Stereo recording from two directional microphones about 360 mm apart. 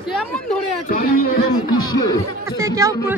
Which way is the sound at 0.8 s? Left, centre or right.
Left.